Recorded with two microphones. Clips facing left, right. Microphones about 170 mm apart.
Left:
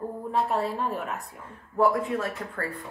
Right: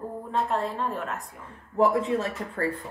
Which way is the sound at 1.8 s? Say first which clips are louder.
Right 1 dB; 25° right (ahead or behind).